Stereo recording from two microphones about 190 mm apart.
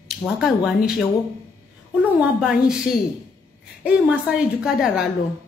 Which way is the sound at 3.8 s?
5° right (ahead or behind).